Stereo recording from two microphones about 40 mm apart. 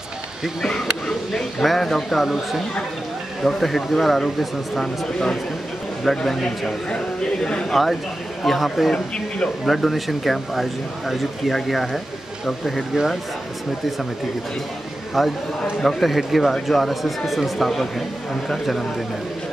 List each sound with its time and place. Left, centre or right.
0.7 s speech: centre
2.2 s speech: centre
3.4 s speech: centre
5.0 s a man's voice: centre
6.0 s a man's voice: centre
7.7 s speech: centre
8.9 s speech: left
9.7 s speech: centre
15.2 s speech: centre